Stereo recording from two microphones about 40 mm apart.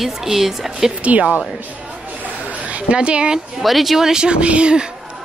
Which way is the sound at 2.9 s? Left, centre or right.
Right.